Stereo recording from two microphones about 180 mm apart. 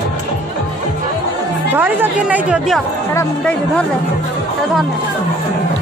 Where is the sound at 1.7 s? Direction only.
10° right (ahead or behind).